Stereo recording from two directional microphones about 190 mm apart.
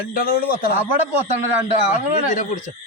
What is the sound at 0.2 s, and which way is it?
Speech, 50° left (ahead or behind).